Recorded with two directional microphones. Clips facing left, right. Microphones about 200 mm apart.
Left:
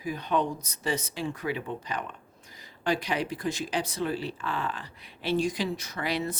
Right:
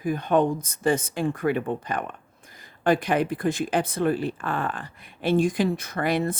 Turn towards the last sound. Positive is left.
turn(degrees=-50)  # may be behind; listen again after turning